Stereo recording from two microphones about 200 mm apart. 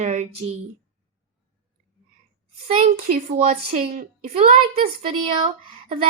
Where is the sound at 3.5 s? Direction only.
35° right (ahead or behind).